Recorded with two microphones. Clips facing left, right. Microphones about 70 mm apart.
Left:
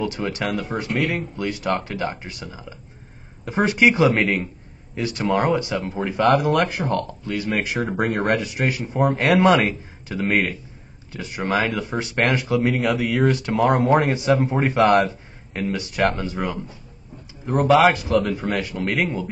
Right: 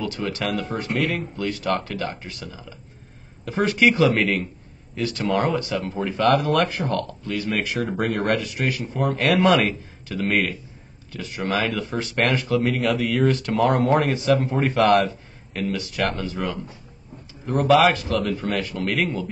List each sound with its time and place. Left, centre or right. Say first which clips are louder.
0.0 s a man's voice: left 2 dB; centre